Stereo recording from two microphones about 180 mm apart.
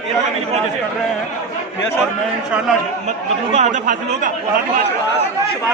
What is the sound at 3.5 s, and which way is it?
Speech, 45° right (ahead or behind).